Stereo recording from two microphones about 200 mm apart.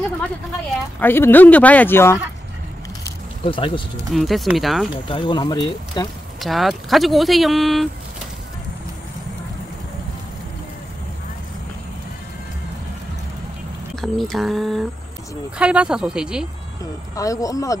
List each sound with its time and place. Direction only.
0.9 s speech: 10° left (ahead or behind)
3.4 s speech: 25° left (ahead or behind)
4.1 s speech: centre (ahead or behind)
5.0 s speech: 25° left (ahead or behind)
6.4 s speech: centre (ahead or behind)
14.0 s speech: centre (ahead or behind)
17.1 s speech: 15° left (ahead or behind)